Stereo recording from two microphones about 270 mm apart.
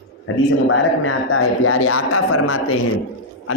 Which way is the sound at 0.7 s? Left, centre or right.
Left.